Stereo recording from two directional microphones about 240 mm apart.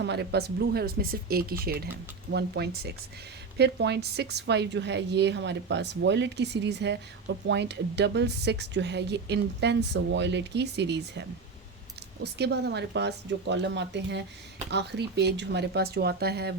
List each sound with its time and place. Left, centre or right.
0.0 s speech: right